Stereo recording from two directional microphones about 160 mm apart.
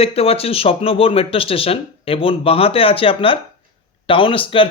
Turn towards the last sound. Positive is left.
turn(degrees=35)  # may be behind; listen again after turning